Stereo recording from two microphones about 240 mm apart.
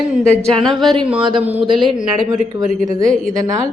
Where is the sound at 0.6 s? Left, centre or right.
Centre.